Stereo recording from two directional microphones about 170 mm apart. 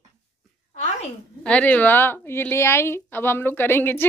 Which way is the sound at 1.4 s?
5° left (ahead or behind).